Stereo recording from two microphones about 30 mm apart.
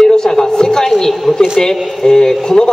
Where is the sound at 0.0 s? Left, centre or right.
Left.